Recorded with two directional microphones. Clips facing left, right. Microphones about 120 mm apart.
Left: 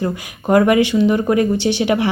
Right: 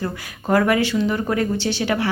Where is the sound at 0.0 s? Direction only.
20° left (ahead or behind).